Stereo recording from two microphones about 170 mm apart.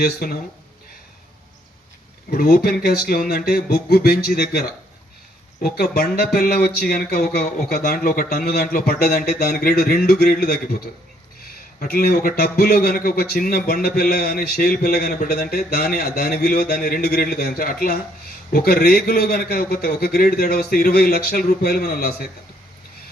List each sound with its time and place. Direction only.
0.0 s speech: 60° left (ahead or behind)
2.3 s speech: 50° left (ahead or behind)
2.6 s speech: 60° left (ahead or behind)
5.6 s a man's voice: 65° left (ahead or behind)